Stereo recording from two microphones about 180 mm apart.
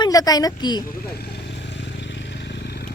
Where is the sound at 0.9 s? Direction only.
65° left (ahead or behind).